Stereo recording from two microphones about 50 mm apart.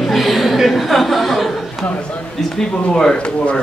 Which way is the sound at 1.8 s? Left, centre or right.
Left.